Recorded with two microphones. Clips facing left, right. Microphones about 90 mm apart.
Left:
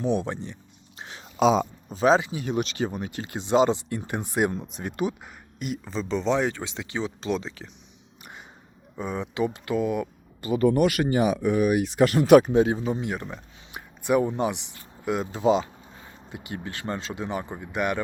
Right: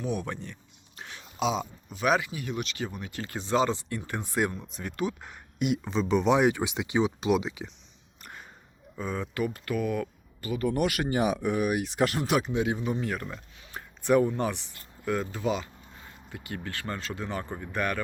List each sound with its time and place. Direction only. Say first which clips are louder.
0.0 s speech: left 6 dB; 25° left (ahead or behind)
0.9 s a sound: left 2 dB; 25° left (ahead or behind)
1.4 s speech: left 8 dB; 45° left (ahead or behind); by 5.1 s 20° left (ahead or behind)
5.2 s speech: right 4 dB; centre (ahead or behind)
8.2 s a sound: left 1 dB; 15° left (ahead or behind)
9.0 s speech: left 3 dB; 15° left (ahead or behind)
10.6 s speech: left 6 dB; 55° left (ahead or behind)
11.8 s speech: left 6 dB; 70° left (ahead or behind); by 12.6 s 50° left (ahead or behind)
12.6 s speech: left 3 dB; 30° left (ahead or behind)